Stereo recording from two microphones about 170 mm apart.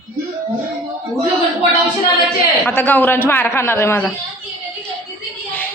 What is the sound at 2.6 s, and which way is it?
A man's voice, 10° left (ahead or behind).